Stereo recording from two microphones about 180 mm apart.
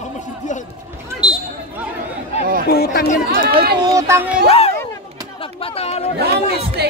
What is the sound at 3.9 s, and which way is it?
Speech, 15° right (ahead or behind).